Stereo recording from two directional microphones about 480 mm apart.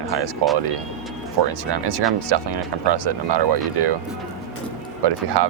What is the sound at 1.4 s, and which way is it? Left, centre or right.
Speech, right.